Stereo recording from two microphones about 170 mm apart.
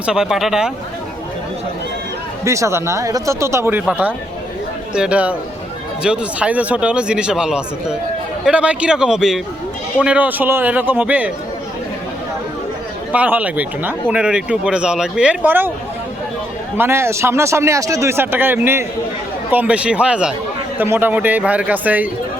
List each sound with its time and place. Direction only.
0.0 s a man's voice: 5° right (ahead or behind)
2.4 s a man's voice: 15° right (ahead or behind)
13.1 s speech: 10° right (ahead or behind)
16.7 s speech: 15° right (ahead or behind)